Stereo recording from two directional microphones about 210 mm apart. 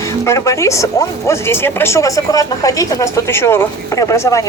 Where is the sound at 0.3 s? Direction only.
15° left (ahead or behind).